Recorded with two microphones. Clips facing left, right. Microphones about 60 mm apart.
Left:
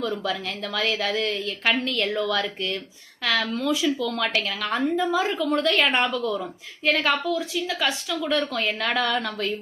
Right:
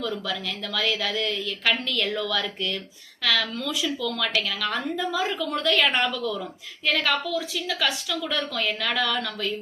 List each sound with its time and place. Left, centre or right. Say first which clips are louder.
0.0 s a woman's voice: left 2 dB; left